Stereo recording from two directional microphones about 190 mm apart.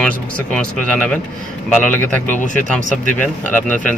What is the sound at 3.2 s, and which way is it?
Speech, 10° left (ahead or behind).